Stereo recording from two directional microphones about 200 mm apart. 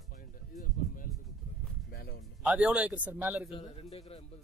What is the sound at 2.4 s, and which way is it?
Speech, 5° right (ahead or behind).